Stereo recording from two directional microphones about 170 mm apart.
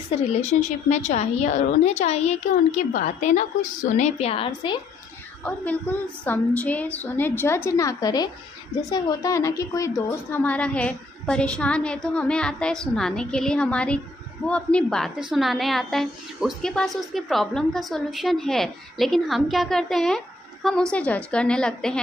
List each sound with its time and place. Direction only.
0.3 s a woman's voice: 40° left (ahead or behind)
5.4 s a woman's voice: 10° left (ahead or behind)